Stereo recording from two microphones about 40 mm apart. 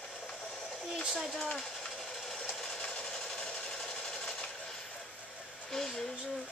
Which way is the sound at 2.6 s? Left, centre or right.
Centre.